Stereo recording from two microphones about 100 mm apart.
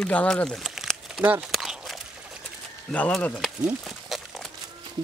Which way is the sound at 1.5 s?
Centre (ahead or behind).